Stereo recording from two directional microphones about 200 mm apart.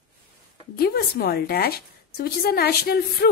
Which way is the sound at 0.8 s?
50° left (ahead or behind).